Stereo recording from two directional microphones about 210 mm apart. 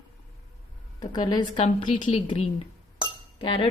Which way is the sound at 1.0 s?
20° left (ahead or behind).